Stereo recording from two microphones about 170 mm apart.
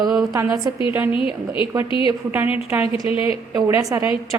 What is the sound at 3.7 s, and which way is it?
Speech, 15° right (ahead or behind).